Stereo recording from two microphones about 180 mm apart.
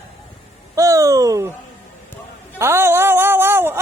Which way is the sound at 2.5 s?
15° right (ahead or behind).